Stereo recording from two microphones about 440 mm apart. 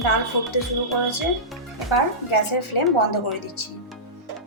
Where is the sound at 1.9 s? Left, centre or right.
Left.